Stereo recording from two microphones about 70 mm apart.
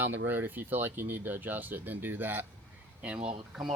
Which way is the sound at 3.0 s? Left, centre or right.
Centre.